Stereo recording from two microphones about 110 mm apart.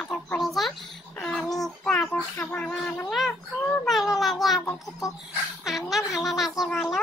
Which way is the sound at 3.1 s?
Centre (ahead or behind).